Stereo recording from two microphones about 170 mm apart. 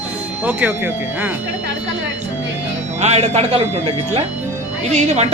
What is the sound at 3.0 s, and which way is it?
Speech, 40° right (ahead or behind).